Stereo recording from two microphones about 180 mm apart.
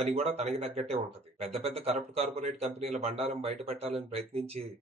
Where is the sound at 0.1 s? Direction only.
35° right (ahead or behind).